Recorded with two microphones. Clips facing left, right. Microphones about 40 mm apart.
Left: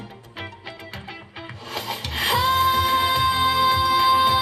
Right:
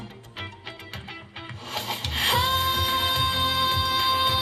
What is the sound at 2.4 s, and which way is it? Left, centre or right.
Music, right.